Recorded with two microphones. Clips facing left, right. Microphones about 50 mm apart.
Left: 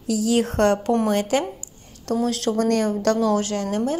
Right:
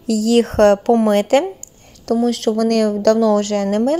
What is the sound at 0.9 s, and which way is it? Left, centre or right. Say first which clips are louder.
Speech: right 7 dB; right.